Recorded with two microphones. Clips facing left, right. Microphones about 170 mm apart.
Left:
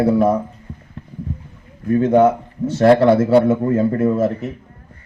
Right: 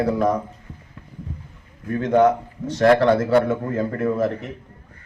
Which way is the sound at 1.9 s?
25° left (ahead or behind).